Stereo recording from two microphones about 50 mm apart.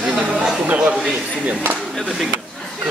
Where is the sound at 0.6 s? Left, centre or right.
Right.